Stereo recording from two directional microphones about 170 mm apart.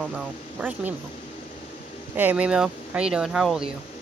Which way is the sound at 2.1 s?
10° right (ahead or behind).